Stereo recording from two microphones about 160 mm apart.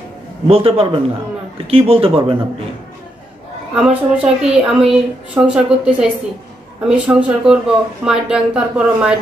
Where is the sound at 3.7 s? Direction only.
5° right (ahead or behind).